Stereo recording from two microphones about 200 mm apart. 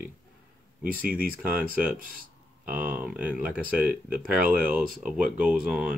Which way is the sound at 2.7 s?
10° right (ahead or behind).